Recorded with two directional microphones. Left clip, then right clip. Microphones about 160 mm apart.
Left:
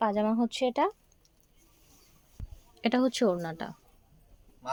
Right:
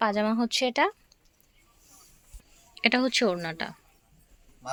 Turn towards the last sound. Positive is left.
turn(degrees=15)  # may be behind; listen again after turning